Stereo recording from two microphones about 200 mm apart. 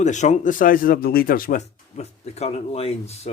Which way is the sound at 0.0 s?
35° left (ahead or behind).